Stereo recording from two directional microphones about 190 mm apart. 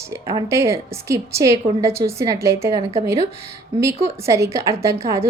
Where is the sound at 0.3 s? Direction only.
15° right (ahead or behind).